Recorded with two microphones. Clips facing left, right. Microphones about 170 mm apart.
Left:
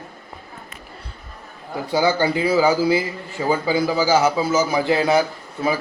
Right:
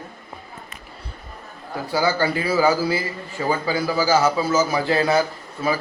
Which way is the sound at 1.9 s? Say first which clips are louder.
Left 2 dB; 20° left (ahead or behind).